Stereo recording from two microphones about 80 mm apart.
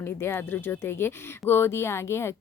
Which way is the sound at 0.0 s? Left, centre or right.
Left.